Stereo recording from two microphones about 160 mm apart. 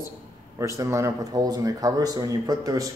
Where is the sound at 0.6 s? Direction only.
20° right (ahead or behind).